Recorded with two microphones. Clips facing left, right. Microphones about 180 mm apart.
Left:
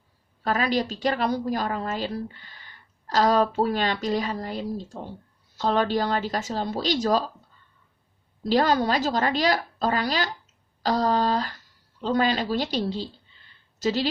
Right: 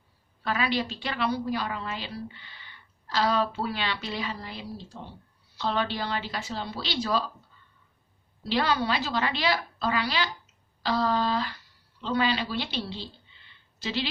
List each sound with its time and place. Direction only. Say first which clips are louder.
0.4 s a woman's voice: left 4 dB; 45° left (ahead or behind)
8.5 s a woman's voice: left 5 dB; 45° left (ahead or behind)